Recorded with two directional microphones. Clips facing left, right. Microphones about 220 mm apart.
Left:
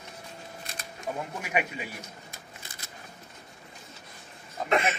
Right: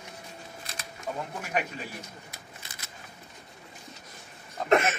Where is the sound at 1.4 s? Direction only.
10° left (ahead or behind).